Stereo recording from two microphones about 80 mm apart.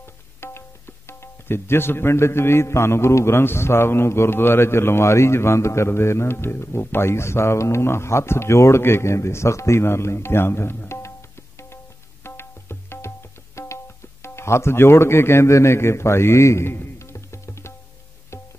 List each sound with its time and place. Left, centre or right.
0.0 s speech: left
18.3 s music: left